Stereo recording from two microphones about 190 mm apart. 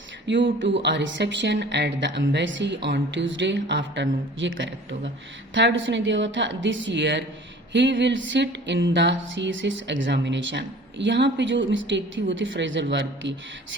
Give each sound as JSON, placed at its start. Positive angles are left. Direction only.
{"t": 0.3, "sound": "music", "side_deg": -75}